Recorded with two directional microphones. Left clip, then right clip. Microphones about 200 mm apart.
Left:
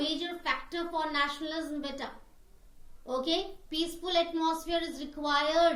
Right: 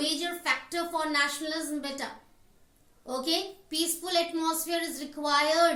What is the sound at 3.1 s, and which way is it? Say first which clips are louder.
Speech: left 1 dB; 5° right (ahead or behind).